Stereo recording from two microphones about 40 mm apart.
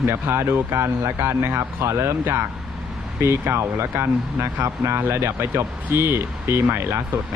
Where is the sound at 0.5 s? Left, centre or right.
Right.